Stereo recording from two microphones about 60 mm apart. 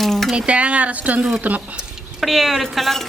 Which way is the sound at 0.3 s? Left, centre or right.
Centre.